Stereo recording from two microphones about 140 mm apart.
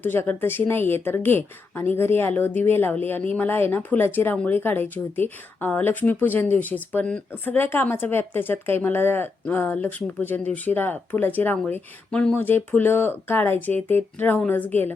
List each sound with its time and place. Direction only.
0.0 s speech: 15° left (ahead or behind)